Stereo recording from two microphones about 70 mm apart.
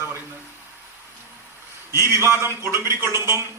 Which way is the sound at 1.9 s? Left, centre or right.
Right.